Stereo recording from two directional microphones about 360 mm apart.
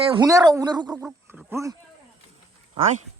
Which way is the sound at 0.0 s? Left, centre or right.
Centre.